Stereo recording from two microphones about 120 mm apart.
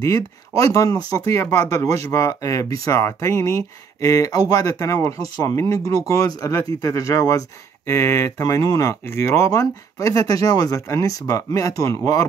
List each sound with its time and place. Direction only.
0.0 s speech: 25° left (ahead or behind)